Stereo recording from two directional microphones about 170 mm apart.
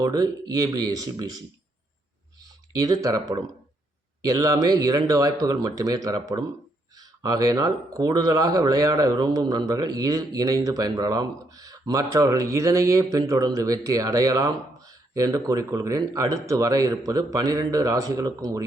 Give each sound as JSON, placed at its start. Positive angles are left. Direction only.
{"t": 0.0, "sound": "speech", "side_deg": -25}
{"t": 2.7, "sound": "speech", "side_deg": -20}